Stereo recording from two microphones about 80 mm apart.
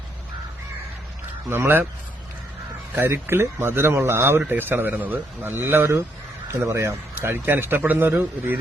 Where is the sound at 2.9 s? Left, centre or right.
Right.